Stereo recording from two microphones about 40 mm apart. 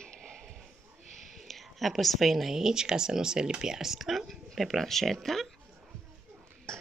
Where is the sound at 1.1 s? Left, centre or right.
Centre.